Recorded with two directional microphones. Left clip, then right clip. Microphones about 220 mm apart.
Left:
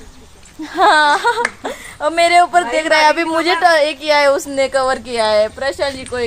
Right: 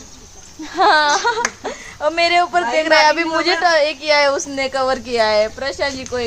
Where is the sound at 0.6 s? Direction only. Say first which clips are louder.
Left 2 dB; 40° left (ahead or behind).